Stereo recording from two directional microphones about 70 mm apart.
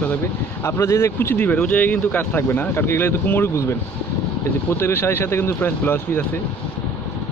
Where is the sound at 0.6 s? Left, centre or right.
Left.